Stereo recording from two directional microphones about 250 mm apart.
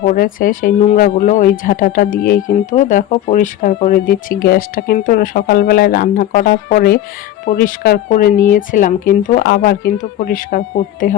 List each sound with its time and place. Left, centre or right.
0.0 s speech: left